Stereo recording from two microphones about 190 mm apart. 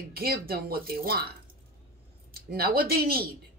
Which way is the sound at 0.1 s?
55° right (ahead or behind).